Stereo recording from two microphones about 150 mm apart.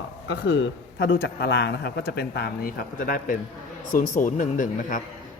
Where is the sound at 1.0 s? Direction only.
90° left.